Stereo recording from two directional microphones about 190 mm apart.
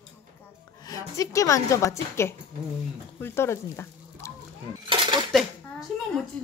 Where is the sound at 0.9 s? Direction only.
20° left (ahead or behind).